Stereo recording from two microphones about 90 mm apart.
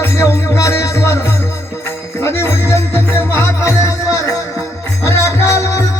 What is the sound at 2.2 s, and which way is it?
Music, 30° left (ahead or behind).